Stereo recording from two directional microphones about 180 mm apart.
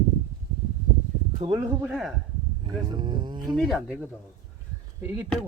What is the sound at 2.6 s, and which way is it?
Speech, 25° right (ahead or behind).